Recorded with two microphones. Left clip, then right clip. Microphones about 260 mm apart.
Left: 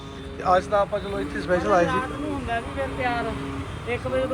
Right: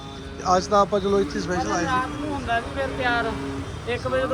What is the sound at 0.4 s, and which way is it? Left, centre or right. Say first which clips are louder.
A man's voice: right 1 dB; centre.